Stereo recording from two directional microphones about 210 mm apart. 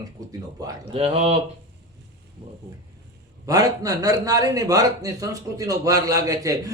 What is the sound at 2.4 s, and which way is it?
A man's voice, 25° right (ahead or behind).